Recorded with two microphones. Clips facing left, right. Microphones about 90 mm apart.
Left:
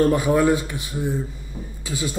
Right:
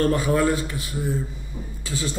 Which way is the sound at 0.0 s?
20° left (ahead or behind).